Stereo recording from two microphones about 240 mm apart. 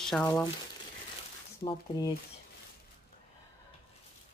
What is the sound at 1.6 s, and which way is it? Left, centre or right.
Speech, left.